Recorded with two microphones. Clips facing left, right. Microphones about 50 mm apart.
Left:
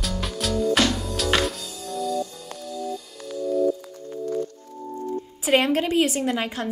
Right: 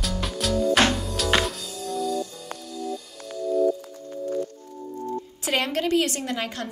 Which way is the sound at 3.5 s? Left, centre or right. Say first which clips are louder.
Even; centre.